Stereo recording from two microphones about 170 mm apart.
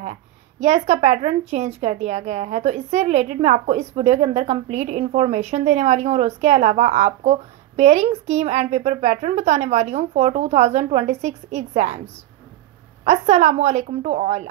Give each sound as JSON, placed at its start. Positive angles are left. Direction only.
{"t": 0.0, "sound": "a woman's voice", "side_deg": -40}
{"t": 13.0, "sound": "a woman's voice", "side_deg": -40}